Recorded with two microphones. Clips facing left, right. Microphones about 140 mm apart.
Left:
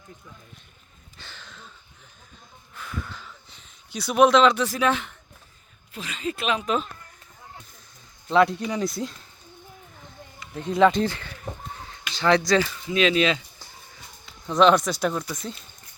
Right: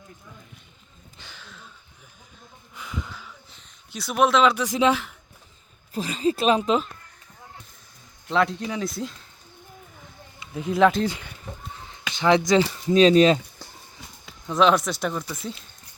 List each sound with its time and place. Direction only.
1.2 s a sound: 10° right (ahead or behind)
2.7 s a sound: 15° right (ahead or behind)
4.9 s speech: 5° right (ahead or behind)
5.9 s speech: 35° right (ahead or behind)
8.3 s speech: centre (ahead or behind)
10.5 s speech: 5° right (ahead or behind)
11.0 s speech: 15° right (ahead or behind)
12.6 s speech: 35° right (ahead or behind)
14.4 s speech: centre (ahead or behind)